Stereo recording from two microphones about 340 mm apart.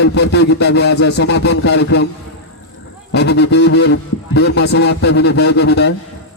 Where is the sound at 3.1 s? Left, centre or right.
Left.